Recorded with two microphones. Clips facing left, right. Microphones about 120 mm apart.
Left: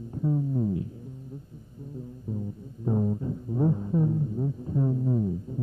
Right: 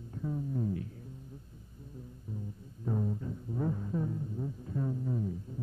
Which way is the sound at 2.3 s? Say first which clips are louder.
Left 8 dB; 25° left (ahead or behind).